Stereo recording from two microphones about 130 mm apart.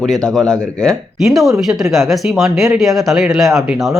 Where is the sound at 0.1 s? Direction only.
5° left (ahead or behind).